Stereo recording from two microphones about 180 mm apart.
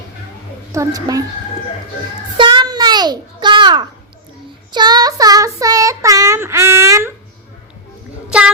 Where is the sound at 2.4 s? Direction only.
25° right (ahead or behind).